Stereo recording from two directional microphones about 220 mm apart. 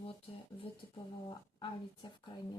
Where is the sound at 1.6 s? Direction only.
20° left (ahead or behind).